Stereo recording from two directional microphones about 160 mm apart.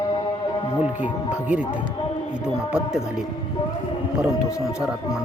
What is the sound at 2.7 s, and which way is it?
Speech, 5° right (ahead or behind).